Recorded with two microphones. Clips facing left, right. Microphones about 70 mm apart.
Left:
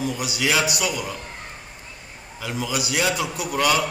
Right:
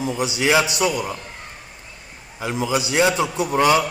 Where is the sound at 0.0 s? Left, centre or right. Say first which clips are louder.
Right 3 dB; right.